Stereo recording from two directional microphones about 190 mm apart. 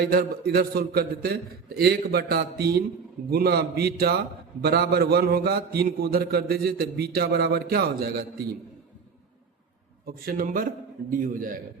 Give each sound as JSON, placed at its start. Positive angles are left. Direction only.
{"t": 0.0, "sound": "a man's voice", "side_deg": -55}
{"t": 10.1, "sound": "a man's voice", "side_deg": -50}